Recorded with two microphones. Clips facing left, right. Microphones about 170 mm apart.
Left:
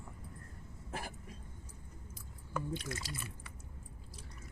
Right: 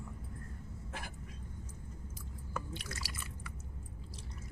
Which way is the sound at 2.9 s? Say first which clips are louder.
Left 3 dB; 25° left (ahead or behind).